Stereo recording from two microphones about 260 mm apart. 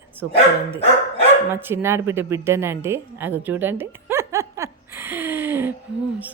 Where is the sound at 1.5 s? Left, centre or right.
Centre.